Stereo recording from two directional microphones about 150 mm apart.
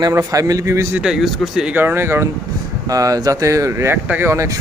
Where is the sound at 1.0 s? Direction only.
5° right (ahead or behind).